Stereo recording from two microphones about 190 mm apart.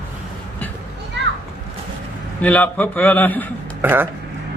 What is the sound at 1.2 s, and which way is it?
Children playing, 70° right (ahead or behind).